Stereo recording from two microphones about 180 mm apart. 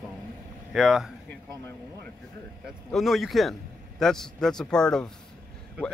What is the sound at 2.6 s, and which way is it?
Speech, centre (ahead or behind).